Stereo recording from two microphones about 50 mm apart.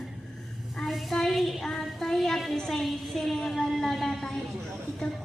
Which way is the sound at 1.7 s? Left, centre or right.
Centre.